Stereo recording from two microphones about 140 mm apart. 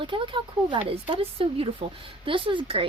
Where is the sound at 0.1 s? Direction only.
35° right (ahead or behind).